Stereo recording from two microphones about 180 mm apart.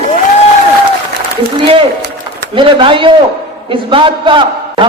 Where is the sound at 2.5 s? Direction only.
30° right (ahead or behind).